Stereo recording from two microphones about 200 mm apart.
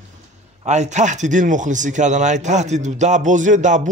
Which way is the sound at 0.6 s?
35° right (ahead or behind).